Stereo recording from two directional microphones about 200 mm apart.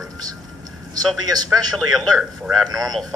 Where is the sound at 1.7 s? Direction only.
Centre (ahead or behind).